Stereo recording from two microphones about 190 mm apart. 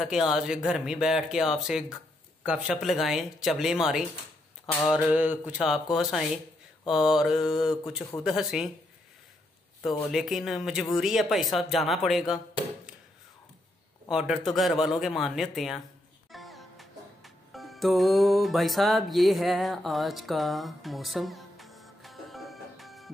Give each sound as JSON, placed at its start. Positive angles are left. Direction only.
{"t": 0.0, "sound": "speech", "side_deg": 0}
{"t": 10.1, "sound": "speech", "side_deg": 0}
{"t": 14.1, "sound": "speech", "side_deg": -5}
{"t": 16.3, "sound": "music", "side_deg": 0}